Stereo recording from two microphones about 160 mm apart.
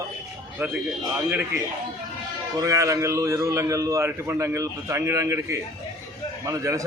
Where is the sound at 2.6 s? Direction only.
20° right (ahead or behind).